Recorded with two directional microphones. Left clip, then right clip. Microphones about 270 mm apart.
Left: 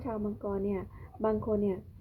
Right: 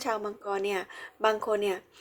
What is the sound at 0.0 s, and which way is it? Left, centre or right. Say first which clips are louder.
A woman's voice: right 5 dB; centre.